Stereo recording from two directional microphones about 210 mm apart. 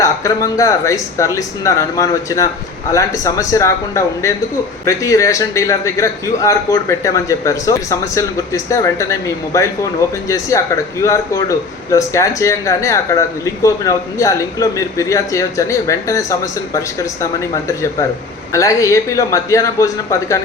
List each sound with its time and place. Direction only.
0.0 s speech: 15° left (ahead or behind)
18.5 s speech: 15° left (ahead or behind)